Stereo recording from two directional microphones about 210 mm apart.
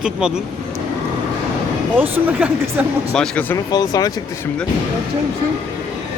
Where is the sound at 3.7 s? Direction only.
20° left (ahead or behind).